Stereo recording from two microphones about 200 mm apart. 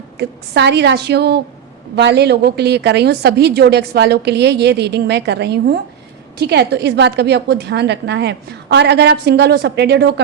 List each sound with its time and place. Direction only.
0.2 s a woman's voice: 55° right (ahead or behind)